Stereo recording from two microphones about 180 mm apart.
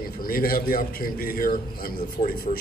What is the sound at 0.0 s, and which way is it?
A man's voice, 55° left (ahead or behind).